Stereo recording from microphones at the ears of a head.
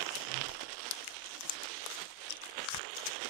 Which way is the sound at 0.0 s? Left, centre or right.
Right.